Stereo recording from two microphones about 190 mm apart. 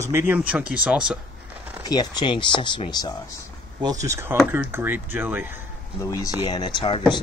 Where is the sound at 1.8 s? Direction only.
20° left (ahead or behind).